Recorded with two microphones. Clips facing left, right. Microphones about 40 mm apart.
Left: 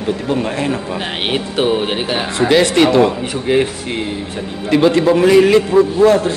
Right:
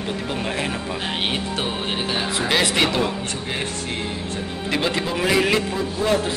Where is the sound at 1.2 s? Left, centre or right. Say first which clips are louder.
Left 11 dB; left.